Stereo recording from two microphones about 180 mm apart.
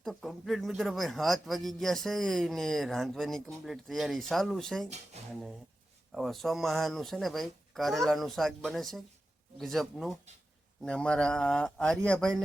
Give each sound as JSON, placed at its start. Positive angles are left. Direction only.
{"t": 0.0, "sound": "a man's voice", "side_deg": 0}
{"t": 5.2, "sound": "a sound", "side_deg": -40}
{"t": 6.1, "sound": "a man's voice", "side_deg": 0}